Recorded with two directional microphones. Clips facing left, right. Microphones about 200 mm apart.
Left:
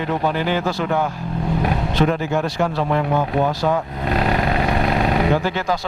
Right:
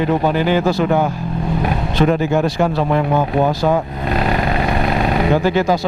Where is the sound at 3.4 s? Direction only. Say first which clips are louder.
Right 4 dB; 25° right (ahead or behind).